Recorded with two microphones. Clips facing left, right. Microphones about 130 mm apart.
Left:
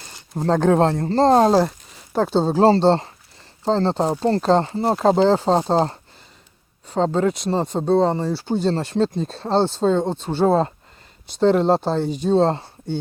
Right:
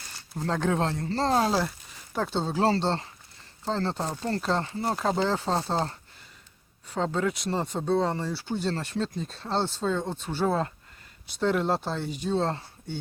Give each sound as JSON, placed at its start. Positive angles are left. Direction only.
{"t": 0.3, "sound": "a man's voice", "side_deg": 40}
{"t": 6.8, "sound": "speech", "side_deg": 25}